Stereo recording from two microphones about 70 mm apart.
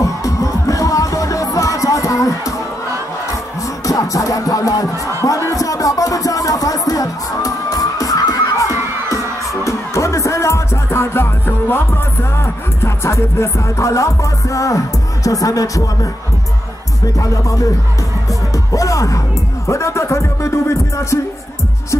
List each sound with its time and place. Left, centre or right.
0.0 s music: left
3.8 s music: left
5.2 s speech: left
6.9 s music: left
17.2 s music: left
18.5 s speech: left